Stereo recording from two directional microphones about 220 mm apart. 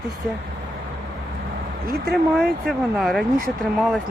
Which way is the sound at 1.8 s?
45° right (ahead or behind).